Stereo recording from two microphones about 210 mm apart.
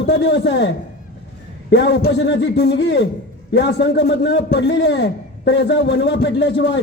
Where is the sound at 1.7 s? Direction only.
55° left (ahead or behind).